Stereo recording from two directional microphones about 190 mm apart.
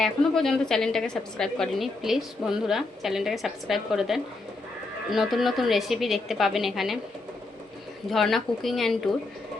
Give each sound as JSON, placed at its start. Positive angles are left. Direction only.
{"t": 0.0, "sound": "a woman's voice", "side_deg": 0}
{"t": 8.1, "sound": "a woman's voice", "side_deg": 0}